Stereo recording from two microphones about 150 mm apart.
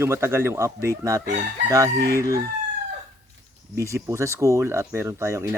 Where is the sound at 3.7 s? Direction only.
20° right (ahead or behind).